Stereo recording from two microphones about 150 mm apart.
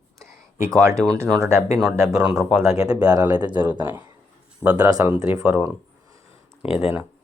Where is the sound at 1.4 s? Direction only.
20° right (ahead or behind).